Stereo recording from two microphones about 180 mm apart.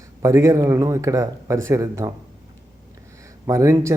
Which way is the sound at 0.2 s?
15° right (ahead or behind).